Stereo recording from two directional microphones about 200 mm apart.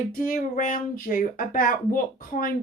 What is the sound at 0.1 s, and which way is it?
Speech, 45° left (ahead or behind).